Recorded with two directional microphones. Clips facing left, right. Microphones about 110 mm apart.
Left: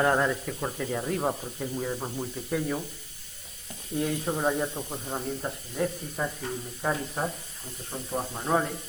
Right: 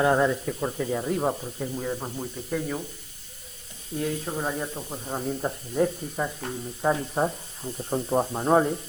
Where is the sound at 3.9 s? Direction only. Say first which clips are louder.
Left 1 dB; 5° left (ahead or behind).